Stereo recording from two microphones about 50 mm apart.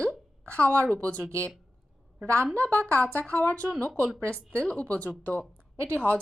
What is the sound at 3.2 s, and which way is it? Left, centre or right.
A woman's voice, left.